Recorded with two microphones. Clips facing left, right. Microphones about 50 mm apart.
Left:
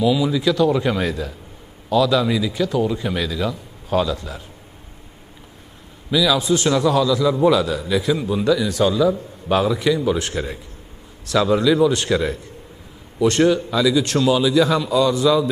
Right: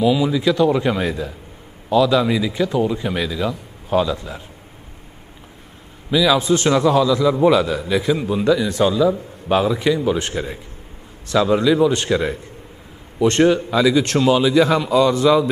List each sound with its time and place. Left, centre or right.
0.0 s a man's voice: centre
6.0 s a man's voice: right
6.4 s a man's voice: right
6.7 s a man's voice: right
8.9 s a man's voice: centre; by 15.5 s right